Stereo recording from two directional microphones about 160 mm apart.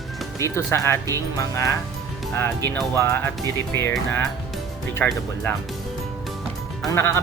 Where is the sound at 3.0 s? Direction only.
15° left (ahead or behind).